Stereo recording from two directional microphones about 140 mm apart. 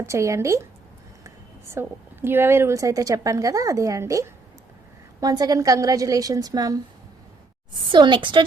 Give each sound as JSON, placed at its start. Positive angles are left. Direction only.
{"t": 0.0, "sound": "a woman's voice", "side_deg": -20}
{"t": 7.9, "sound": "a woman's voice", "side_deg": -35}